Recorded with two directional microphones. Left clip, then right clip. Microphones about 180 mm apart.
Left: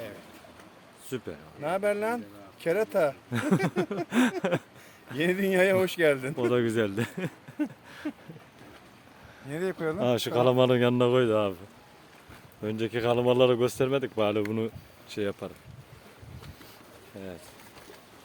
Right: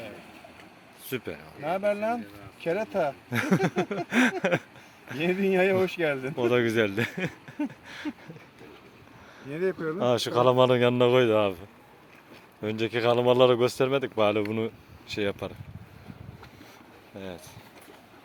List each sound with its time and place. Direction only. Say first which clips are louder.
1.1 s speech: right 2 dB; 5° left (ahead or behind)
2.6 s speech: left 2 dB; 35° left (ahead or behind)
3.2 s speech: right 2 dB; 10° left (ahead or behind)
5.2 s speech: even; 40° left (ahead or behind)
6.3 s speech: right 2 dB; 10° left (ahead or behind)
9.6 s speech: right 2 dB; 65° left (ahead or behind)
10.0 s speech: right 2 dB; 25° left (ahead or behind); by 11.5 s 5° left (ahead or behind)
12.6 s speech: right 3 dB; 10° left (ahead or behind)